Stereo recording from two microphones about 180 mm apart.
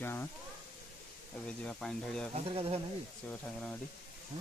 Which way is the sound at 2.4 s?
30° right (ahead or behind).